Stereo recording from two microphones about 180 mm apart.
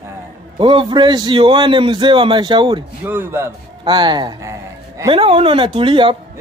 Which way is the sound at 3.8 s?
25° right (ahead or behind).